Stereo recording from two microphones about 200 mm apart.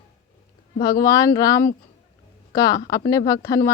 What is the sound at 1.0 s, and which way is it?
Speech, 20° left (ahead or behind).